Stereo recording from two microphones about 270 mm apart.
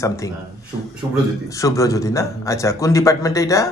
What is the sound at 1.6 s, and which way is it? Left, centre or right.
A man's voice, centre.